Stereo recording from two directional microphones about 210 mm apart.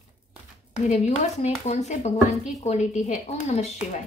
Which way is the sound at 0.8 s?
35° left (ahead or behind).